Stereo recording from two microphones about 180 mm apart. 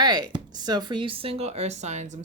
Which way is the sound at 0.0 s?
25° right (ahead or behind).